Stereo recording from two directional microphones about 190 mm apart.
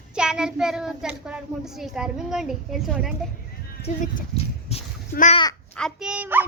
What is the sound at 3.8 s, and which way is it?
Speech, 40° left (ahead or behind).